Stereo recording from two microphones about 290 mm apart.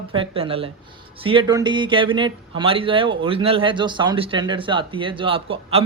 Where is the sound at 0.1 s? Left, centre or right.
Centre.